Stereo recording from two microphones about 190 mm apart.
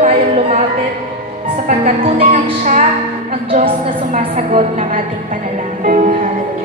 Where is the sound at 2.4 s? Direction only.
40° right (ahead or behind).